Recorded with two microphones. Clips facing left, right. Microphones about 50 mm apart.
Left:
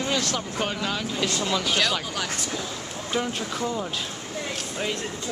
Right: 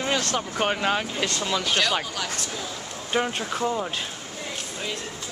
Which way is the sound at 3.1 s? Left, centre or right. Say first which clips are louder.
Right 3 dB; right.